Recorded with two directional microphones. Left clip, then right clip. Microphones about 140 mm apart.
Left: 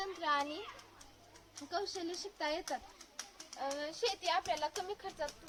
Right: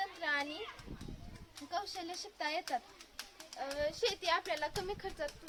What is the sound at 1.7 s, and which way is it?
Speech, 40° right (ahead or behind).